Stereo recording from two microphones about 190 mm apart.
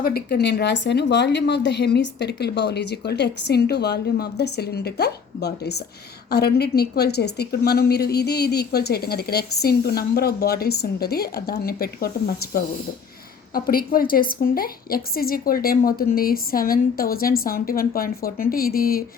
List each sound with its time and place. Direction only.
0.0 s a woman's voice: 55° left (ahead or behind)